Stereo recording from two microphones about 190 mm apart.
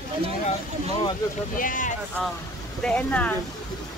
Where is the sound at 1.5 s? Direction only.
45° left (ahead or behind).